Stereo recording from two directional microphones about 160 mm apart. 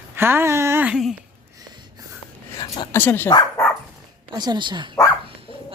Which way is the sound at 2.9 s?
10° left (ahead or behind).